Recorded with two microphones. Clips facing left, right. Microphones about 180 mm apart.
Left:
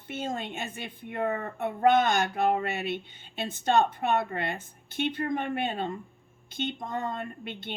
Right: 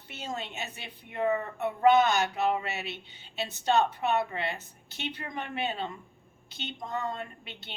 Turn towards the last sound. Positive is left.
turn(degrees=50)  # may be behind; listen again after turning